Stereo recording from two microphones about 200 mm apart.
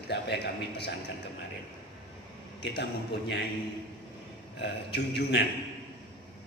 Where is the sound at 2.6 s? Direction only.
55° left (ahead or behind).